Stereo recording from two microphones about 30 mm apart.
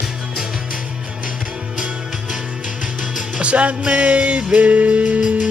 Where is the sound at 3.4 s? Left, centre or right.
Right.